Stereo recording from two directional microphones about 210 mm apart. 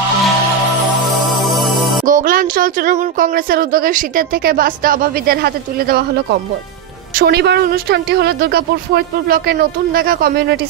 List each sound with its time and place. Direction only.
1.0 s music: centre (ahead or behind)
2.0 s speech: 40° right (ahead or behind)
7.2 s speech: 50° right (ahead or behind)